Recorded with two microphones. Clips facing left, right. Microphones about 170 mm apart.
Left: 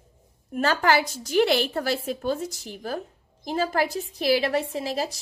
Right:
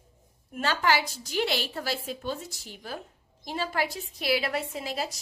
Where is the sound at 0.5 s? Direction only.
45° left (ahead or behind).